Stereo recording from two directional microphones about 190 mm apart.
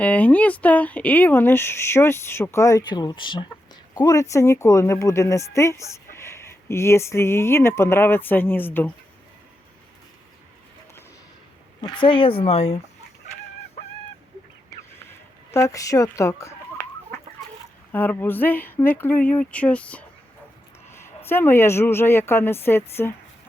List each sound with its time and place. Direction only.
0.0 s speech: 10° left (ahead or behind)
11.8 s speech: 25° left (ahead or behind)
15.5 s chicken: 15° left (ahead or behind)
17.9 s speech: 10° left (ahead or behind)